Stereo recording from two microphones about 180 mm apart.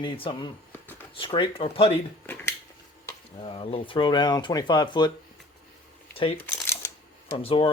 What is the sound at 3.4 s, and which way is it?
Speech, 30° left (ahead or behind).